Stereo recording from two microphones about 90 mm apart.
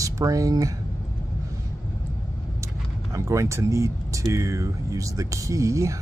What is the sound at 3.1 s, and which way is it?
Speech, 35° right (ahead or behind).